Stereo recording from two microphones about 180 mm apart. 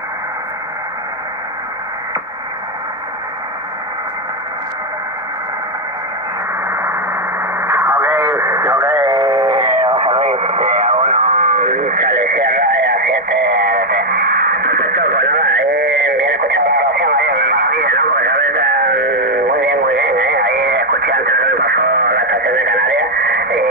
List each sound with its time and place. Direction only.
6.7 s radio: 15° right (ahead or behind)
11.9 s radio: 60° right (ahead or behind)